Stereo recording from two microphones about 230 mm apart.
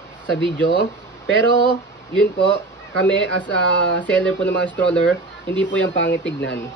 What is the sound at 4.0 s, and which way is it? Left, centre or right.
Speech, centre.